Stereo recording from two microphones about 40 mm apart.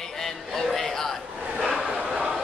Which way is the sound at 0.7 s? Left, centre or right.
Centre.